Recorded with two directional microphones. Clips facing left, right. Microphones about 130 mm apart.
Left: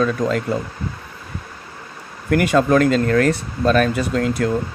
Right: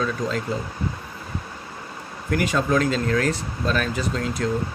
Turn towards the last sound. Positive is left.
turn(degrees=55)  # may be behind; listen again after turning